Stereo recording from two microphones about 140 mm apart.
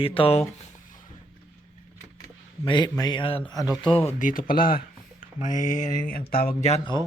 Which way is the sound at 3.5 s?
25° left (ahead or behind).